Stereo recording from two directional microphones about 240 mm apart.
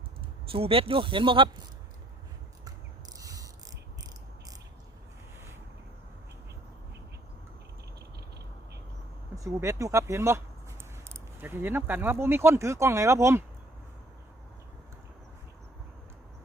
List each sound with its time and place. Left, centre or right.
0.5 s speech: right
3.2 s a sound: centre
9.3 s speech: centre